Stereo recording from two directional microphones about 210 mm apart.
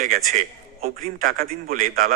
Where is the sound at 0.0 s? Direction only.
35° right (ahead or behind).